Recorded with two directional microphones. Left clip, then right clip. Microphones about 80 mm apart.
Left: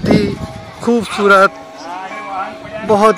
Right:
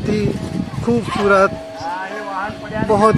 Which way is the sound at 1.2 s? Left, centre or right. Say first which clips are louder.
Left 5 dB; left.